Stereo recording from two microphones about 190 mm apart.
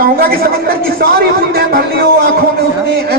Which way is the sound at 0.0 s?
55° right (ahead or behind).